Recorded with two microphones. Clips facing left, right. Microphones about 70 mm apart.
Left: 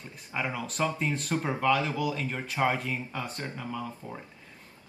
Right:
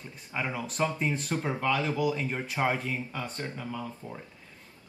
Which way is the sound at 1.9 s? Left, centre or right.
Centre.